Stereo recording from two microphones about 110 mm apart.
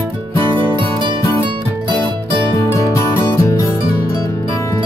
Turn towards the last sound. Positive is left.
turn(degrees=25)  # may be behind; listen again after turning